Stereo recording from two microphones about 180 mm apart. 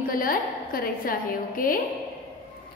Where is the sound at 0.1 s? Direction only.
50° left (ahead or behind).